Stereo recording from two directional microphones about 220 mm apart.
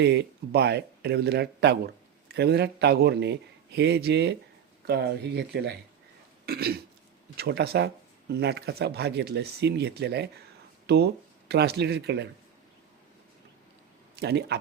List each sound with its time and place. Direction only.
0.0 s speech: 50° right (ahead or behind)
6.4 s throat clearing: 45° right (ahead or behind)
7.3 s speech: 45° right (ahead or behind)
14.2 s speech: 50° right (ahead or behind)